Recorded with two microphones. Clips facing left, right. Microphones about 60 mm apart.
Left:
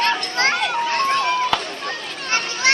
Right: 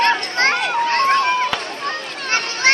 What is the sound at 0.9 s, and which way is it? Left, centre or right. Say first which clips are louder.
Run: right 5 dB; right.